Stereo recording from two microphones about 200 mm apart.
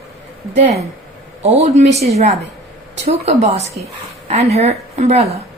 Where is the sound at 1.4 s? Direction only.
30° right (ahead or behind).